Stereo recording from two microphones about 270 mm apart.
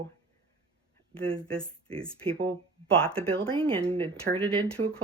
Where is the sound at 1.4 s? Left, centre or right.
Centre.